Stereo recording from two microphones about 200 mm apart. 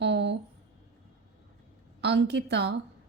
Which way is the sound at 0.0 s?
60° right (ahead or behind).